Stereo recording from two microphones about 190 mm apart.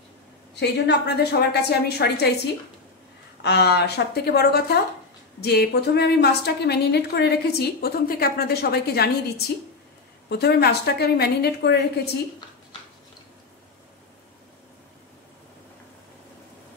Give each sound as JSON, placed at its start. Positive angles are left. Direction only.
{"t": 0.6, "sound": "a woman's voice", "side_deg": 60}
{"t": 3.4, "sound": "a woman's voice", "side_deg": 60}
{"t": 10.3, "sound": "a woman's voice", "side_deg": 60}